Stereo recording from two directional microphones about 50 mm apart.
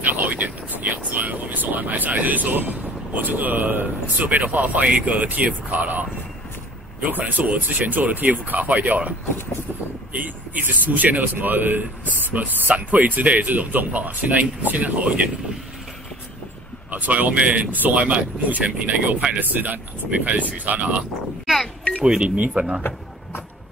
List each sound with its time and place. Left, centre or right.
0.2 s speech: right
10.1 s speech: right
16.9 s speech: right
22.0 s speech: centre